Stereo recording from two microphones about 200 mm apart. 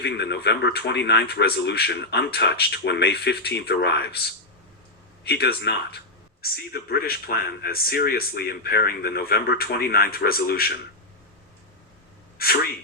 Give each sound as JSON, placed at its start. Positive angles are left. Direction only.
{"t": 0.0, "sound": "speech", "side_deg": 55}